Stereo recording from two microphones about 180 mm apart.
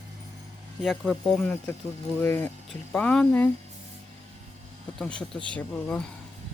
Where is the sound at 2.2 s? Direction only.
15° left (ahead or behind).